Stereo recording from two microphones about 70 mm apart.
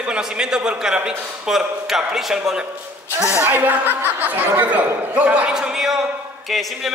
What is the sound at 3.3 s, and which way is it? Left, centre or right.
A man's voice, right.